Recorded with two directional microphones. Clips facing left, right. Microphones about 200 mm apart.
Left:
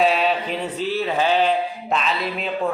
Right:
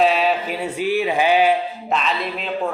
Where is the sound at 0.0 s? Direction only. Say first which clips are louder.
Right 1 dB; centre (ahead or behind).